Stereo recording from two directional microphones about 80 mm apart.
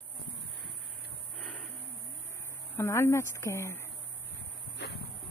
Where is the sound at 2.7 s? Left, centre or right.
Left.